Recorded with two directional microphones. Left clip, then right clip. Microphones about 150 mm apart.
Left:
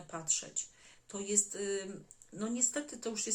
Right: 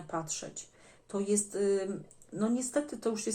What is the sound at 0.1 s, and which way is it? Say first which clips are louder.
Speech: right 1 dB; 10° left (ahead or behind).